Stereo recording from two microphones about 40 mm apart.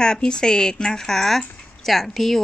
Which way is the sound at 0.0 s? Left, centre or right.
Centre.